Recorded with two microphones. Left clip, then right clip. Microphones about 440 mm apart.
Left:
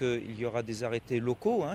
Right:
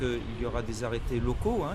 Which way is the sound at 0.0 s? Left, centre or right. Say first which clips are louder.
Left 1 dB; right.